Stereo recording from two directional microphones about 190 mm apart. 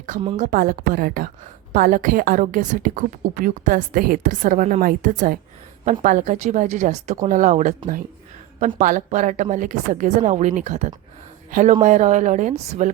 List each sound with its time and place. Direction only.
0.3 s a woman's voice: 45° right (ahead or behind)